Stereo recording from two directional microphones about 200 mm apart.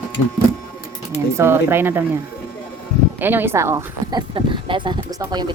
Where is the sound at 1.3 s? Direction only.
10° right (ahead or behind).